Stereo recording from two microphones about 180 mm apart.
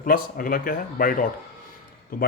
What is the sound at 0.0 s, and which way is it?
Speech, 50° left (ahead or behind).